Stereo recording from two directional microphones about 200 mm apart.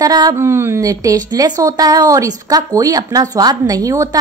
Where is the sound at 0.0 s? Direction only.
20° right (ahead or behind).